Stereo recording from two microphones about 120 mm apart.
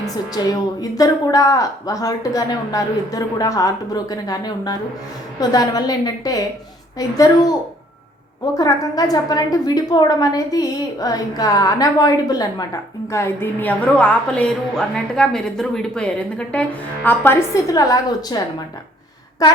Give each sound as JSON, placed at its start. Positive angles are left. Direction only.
{"t": 0.4, "sound": "a woman's voice", "side_deg": 35}
{"t": 8.5, "sound": "a woman's voice", "side_deg": 30}
{"t": 13.1, "sound": "a woman's voice", "side_deg": 20}
{"t": 17.5, "sound": "a woman's voice", "side_deg": 30}